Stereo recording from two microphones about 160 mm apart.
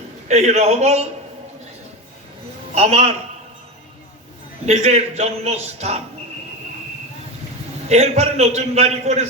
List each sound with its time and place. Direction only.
0.3 s a man's voice: 45° right (ahead or behind)
2.7 s a man's voice: 40° right (ahead or behind)
4.6 s a man's voice: 45° right (ahead or behind)
7.9 s a man's voice: 45° right (ahead or behind)